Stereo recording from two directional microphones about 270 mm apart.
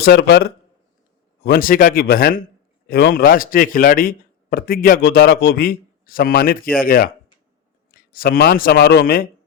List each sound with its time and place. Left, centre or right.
0.0 s a man's voice: left